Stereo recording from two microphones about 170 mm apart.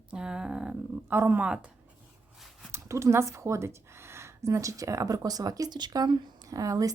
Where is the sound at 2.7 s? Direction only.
15° right (ahead or behind).